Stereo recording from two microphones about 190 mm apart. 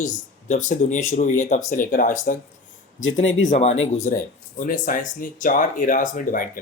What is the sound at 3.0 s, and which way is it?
Speech, 90° left.